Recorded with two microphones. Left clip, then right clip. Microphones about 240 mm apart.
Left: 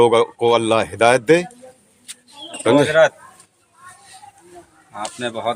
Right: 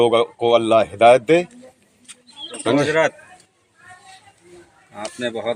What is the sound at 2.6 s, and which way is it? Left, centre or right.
Speech, left.